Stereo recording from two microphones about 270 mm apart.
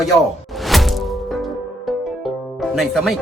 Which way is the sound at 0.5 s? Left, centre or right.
Centre.